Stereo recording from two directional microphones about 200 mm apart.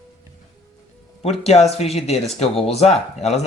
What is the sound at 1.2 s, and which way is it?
Speech, 30° left (ahead or behind).